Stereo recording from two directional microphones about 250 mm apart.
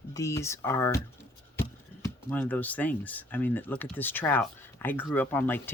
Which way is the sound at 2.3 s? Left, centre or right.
Centre.